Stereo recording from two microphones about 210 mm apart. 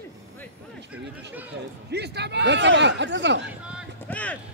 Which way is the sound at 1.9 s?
50° right (ahead or behind).